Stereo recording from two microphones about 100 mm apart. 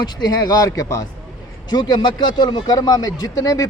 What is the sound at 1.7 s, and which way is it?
A man's voice, 45° left (ahead or behind).